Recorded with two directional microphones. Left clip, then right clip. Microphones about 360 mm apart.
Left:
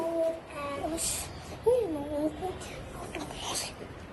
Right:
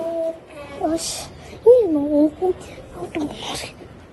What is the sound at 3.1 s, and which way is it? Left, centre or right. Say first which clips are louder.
Speech: right 9 dB; right.